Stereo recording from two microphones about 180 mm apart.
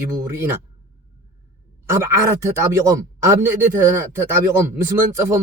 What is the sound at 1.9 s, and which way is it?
Speech, 15° right (ahead or behind).